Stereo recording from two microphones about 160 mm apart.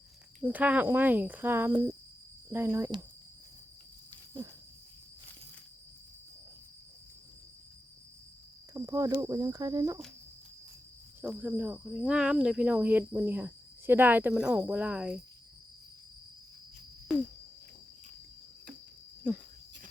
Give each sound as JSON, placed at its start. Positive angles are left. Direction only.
{"t": 0.4, "sound": "speech", "side_deg": -10}
{"t": 8.7, "sound": "speech", "side_deg": -20}
{"t": 11.2, "sound": "speech", "side_deg": -10}
{"t": 17.1, "sound": "cricket", "side_deg": 0}